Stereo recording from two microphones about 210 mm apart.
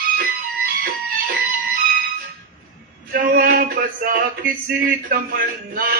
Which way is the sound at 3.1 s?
45° right (ahead or behind).